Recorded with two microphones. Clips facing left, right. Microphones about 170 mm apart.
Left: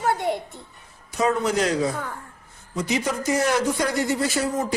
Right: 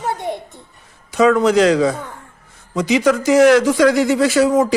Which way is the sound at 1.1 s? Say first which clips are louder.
Right 9 dB; 90° right.